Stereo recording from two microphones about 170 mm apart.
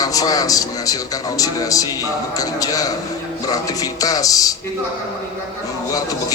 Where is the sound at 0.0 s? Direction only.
20° left (ahead or behind).